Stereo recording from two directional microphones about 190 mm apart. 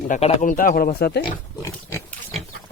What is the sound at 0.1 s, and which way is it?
Speech, 35° left (ahead or behind).